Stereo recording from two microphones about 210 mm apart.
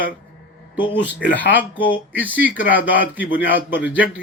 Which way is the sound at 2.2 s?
5° right (ahead or behind).